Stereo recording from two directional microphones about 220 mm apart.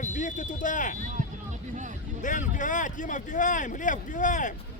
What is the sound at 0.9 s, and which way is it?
Speech, 35° right (ahead or behind).